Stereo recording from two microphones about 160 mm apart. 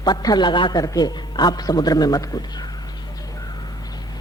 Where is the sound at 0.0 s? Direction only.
25° left (ahead or behind).